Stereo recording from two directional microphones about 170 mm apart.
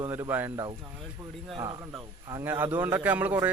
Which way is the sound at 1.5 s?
30° right (ahead or behind).